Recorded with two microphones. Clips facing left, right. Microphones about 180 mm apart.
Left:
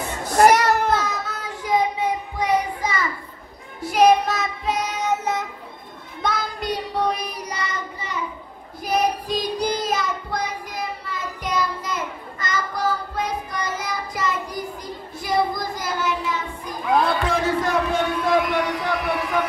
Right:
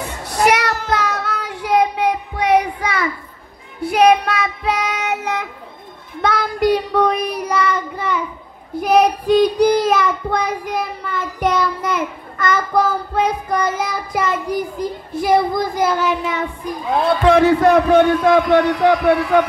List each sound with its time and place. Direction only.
0.5 s child singing: 70° right (ahead or behind)
17.3 s a man's voice: 65° right (ahead or behind)